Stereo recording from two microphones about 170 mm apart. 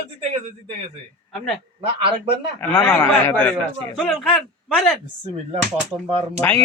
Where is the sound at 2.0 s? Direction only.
30° right (ahead or behind).